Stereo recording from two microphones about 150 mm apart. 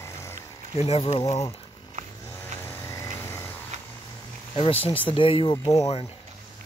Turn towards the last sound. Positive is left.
turn(degrees=20)  # may be behind; listen again after turning